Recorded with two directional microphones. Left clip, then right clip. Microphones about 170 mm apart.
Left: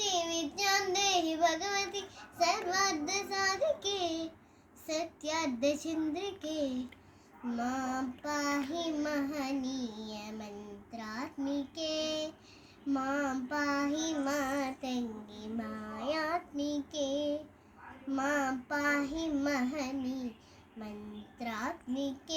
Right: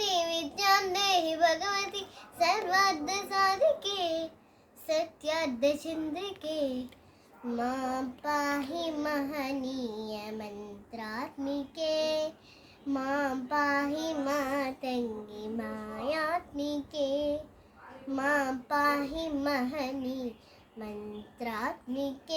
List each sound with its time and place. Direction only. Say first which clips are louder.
0.0 s child singing: right 3 dB; 20° right (ahead or behind)
21.3 s child singing: right 3 dB; 20° right (ahead or behind)